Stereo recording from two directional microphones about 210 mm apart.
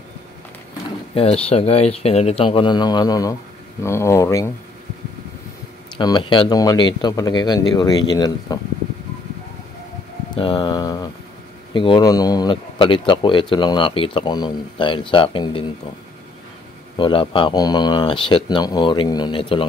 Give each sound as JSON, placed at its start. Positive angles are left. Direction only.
{"t": 1.1, "sound": "speech", "side_deg": 30}
{"t": 5.9, "sound": "speech", "side_deg": 20}
{"t": 10.3, "sound": "a sound", "side_deg": 25}
{"t": 11.7, "sound": "speech", "side_deg": 25}
{"t": 16.9, "sound": "speech", "side_deg": 25}